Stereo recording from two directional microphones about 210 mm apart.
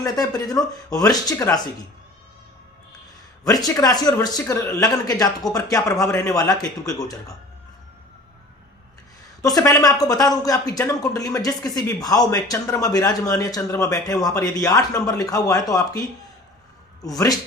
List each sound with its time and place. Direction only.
0.0 s speech: 15° left (ahead or behind)
3.4 s speech: 15° left (ahead or behind)
9.6 s speech: 15° left (ahead or behind)